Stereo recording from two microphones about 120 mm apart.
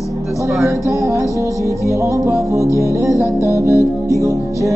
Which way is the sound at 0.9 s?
25° right (ahead or behind).